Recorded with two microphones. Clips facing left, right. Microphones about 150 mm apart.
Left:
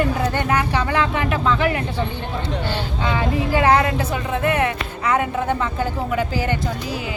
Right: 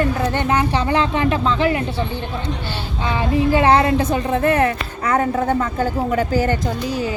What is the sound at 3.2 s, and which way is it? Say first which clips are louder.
Speech: right 4 dB; 25° right (ahead or behind).